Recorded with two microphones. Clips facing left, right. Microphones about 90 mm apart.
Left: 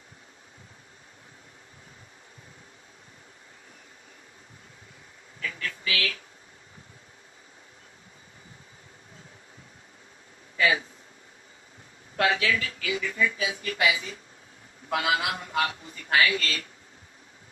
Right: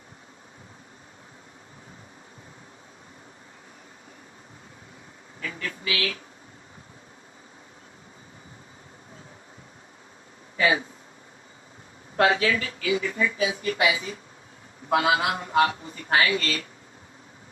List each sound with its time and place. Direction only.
5.4 s speech: 30° right (ahead or behind)
10.6 s speech: 35° right (ahead or behind)
12.1 s speech: 35° right (ahead or behind)